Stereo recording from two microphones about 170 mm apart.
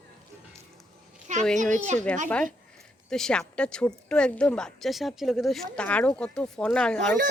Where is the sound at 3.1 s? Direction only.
5° left (ahead or behind).